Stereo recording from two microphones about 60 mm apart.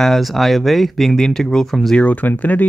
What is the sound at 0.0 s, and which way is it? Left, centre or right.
Speech, centre.